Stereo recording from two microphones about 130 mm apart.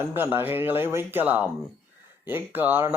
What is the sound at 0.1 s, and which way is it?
Speech, 15° right (ahead or behind).